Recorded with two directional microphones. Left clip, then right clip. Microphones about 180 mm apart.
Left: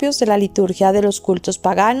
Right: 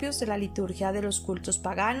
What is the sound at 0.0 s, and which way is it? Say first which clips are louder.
A woman's voice: left 15 dB; 40° left (ahead or behind).